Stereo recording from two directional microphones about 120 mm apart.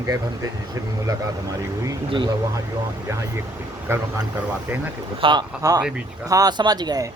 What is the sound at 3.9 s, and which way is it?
Speech, 20° right (ahead or behind).